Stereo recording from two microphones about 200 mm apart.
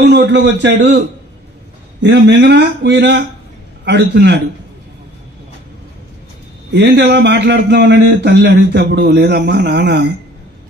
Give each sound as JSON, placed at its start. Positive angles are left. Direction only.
{"t": 0.0, "sound": "a man's voice", "side_deg": -60}
{"t": 6.7, "sound": "a man's voice", "side_deg": -60}